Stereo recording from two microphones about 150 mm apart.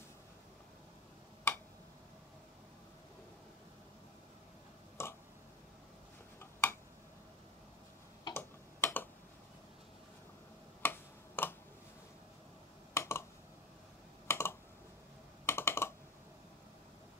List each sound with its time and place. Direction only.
1.5 s tick-tock: 15° left (ahead or behind)
5.0 s a sound: 15° left (ahead or behind)
6.4 s tick-tock: 15° left (ahead or behind)
8.3 s tick-tock: 15° left (ahead or behind)
10.8 s tick-tock: 15° left (ahead or behind)
12.9 s computer keyboard: 15° left (ahead or behind)
14.2 s computer keyboard: 15° left (ahead or behind)